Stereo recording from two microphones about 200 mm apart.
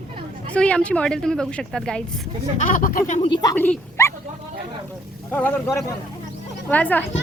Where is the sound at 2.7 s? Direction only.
45° left (ahead or behind).